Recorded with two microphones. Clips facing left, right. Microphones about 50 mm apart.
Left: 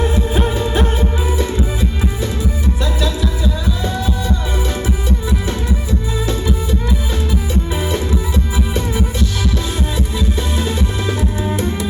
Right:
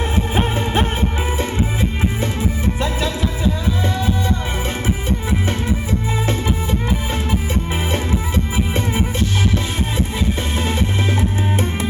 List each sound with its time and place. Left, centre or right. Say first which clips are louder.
0.0 s music: left 2 dB; right